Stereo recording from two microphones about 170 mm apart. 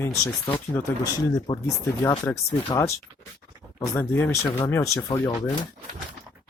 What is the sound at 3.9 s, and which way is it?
Speech, 15° left (ahead or behind).